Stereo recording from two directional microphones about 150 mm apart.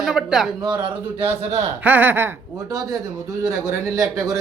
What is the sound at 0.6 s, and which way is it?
Speech, 30° right (ahead or behind).